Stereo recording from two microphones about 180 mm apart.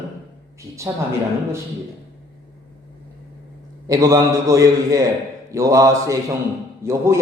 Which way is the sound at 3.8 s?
20° right (ahead or behind).